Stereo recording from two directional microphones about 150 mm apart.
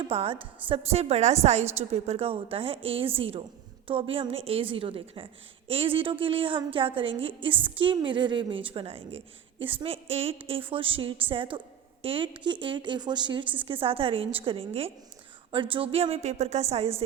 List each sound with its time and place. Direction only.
0.0 s a woman's voice: 40° right (ahead or behind)